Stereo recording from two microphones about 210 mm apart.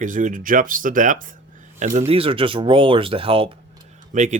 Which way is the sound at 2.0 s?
30° right (ahead or behind).